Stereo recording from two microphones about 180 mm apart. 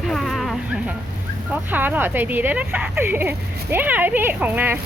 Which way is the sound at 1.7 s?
10° right (ahead or behind).